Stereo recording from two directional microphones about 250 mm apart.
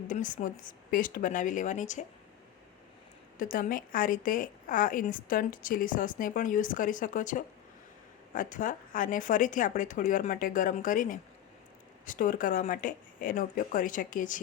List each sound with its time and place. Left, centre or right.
0.1 s a woman's voice: left
3.3 s a woman's voice: left